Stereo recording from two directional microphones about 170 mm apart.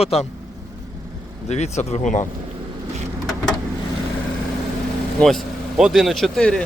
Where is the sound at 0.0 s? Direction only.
35° left (ahead or behind).